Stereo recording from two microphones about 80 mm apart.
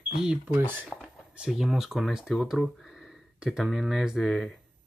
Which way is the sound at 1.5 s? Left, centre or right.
Centre.